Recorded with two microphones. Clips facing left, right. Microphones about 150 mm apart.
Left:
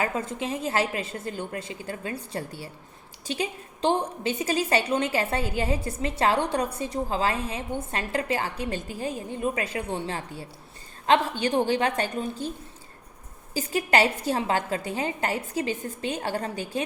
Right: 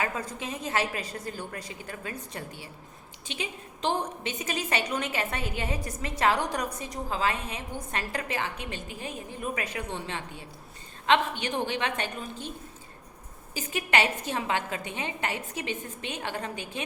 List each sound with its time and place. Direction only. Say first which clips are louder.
0.0 s a woman's voice: left 4 dB; 25° left (ahead or behind)
13.5 s a woman's voice: left 4 dB; 35° left (ahead or behind)